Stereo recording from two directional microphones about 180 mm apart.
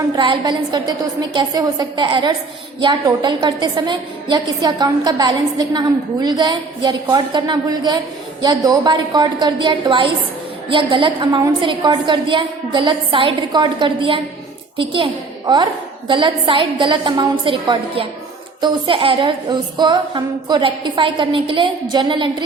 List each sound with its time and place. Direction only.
0.2 s a woman's voice: 25° right (ahead or behind)